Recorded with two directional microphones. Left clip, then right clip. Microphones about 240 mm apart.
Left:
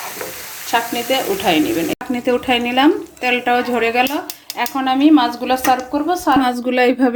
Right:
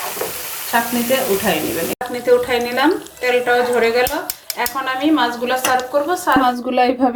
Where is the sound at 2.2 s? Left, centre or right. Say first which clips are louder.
Right 2 dB; left.